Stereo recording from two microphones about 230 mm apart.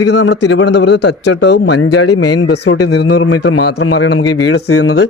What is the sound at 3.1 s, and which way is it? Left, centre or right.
Speech, left.